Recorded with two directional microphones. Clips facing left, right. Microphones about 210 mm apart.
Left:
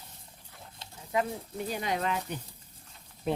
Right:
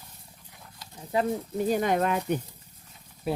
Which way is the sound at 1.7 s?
50° right (ahead or behind).